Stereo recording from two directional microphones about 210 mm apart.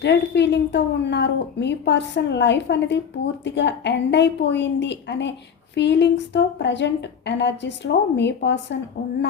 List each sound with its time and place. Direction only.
0.0 s a woman's voice: 55° left (ahead or behind)